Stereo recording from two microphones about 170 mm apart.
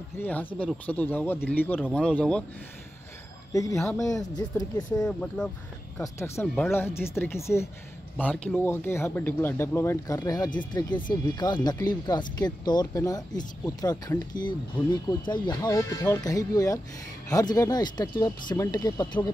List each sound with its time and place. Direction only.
0.2 s speech: 10° left (ahead or behind)
4.0 s speech: 20° left (ahead or behind)
4.9 s speech: 5° left (ahead or behind)
5.9 s speech: 15° left (ahead or behind)
6.4 s speech: 5° left (ahead or behind); by 19.3 s 25° left (ahead or behind)